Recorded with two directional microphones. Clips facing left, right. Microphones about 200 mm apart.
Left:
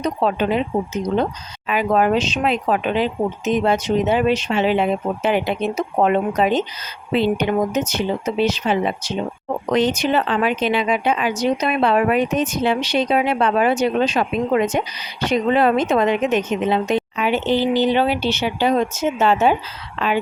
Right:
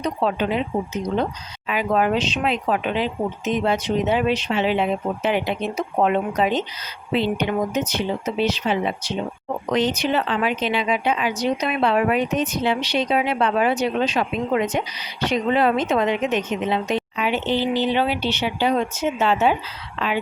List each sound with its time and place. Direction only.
0.0 s speech: 45° left (ahead or behind)
1.6 s speech: 50° left (ahead or behind)